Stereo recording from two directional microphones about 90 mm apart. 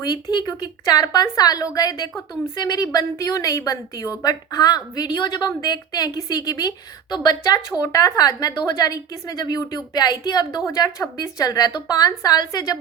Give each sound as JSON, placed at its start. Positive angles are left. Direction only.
{"t": 0.0, "sound": "a woman's voice", "side_deg": 45}
{"t": 10.7, "sound": "a woman's voice", "side_deg": 35}